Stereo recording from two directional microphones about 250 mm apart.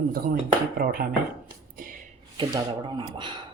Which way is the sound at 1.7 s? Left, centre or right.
Right.